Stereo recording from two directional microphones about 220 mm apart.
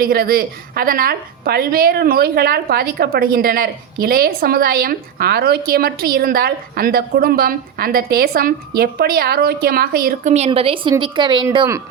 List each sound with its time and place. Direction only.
0.0 s a woman's voice: 45° right (ahead or behind); by 11.8 s 15° right (ahead or behind)